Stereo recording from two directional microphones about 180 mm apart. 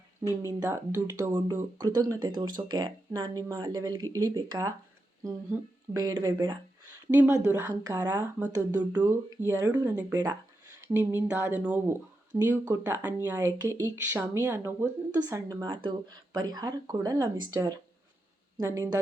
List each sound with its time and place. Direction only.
0.4 s speech: 15° right (ahead or behind)
7.1 s speech: 10° right (ahead or behind)